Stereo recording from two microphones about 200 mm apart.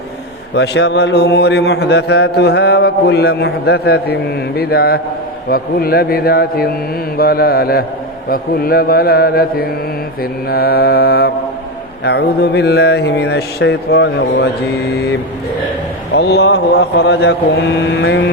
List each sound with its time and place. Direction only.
0.5 s a man's voice: 60° left (ahead or behind)
16.1 s speech: 55° left (ahead or behind)